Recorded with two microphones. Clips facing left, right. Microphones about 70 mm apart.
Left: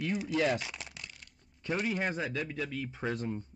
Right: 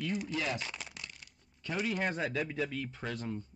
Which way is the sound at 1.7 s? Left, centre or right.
Centre.